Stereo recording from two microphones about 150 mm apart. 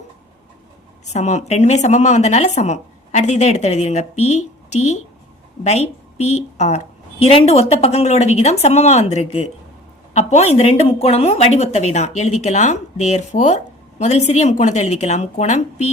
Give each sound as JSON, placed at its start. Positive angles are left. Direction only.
{"t": 1.1, "sound": "speech", "side_deg": 50}
{"t": 6.1, "sound": "speech", "side_deg": 50}